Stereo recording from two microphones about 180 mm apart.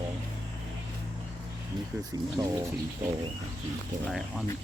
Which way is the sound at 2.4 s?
25° right (ahead or behind).